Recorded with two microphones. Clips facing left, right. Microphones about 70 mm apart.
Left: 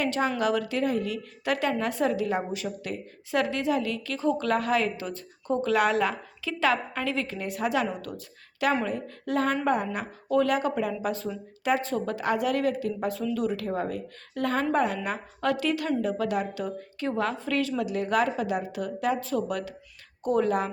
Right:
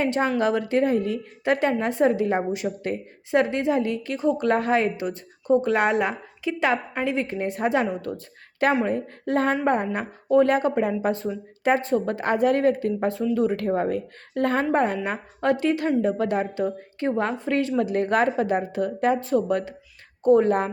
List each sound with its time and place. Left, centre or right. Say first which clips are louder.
0.0 s a woman's voice: right 4 dB; right